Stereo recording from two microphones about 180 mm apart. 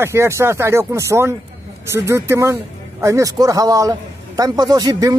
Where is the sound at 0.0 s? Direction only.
15° right (ahead or behind).